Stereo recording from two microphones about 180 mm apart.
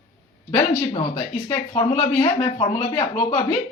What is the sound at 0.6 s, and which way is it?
Speech, 30° left (ahead or behind).